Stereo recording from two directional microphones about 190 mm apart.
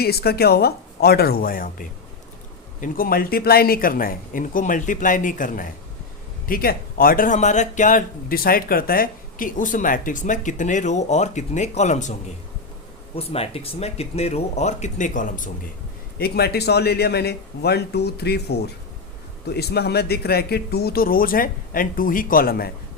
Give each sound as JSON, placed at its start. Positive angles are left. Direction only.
{"t": 0.0, "sound": "a man's voice", "side_deg": 55}
{"t": 2.8, "sound": "a man's voice", "side_deg": 50}
{"t": 13.1, "sound": "a man's voice", "side_deg": 30}
{"t": 16.1, "sound": "a man's voice", "side_deg": 55}